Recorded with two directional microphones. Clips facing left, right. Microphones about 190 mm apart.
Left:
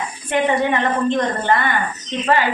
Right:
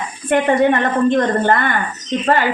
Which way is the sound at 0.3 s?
55° right (ahead or behind).